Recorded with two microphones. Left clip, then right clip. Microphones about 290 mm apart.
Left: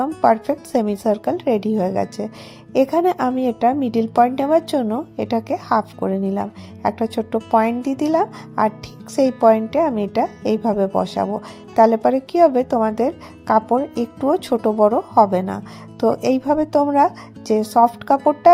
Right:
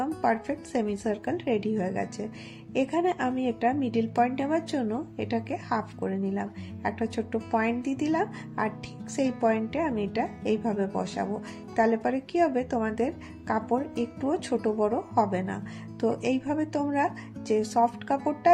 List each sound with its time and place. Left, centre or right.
0.0 s a woman's voice: left